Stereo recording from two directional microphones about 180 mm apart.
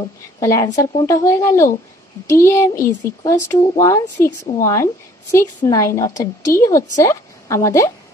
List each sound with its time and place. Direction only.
0.0 s a woman's voice: 15° left (ahead or behind)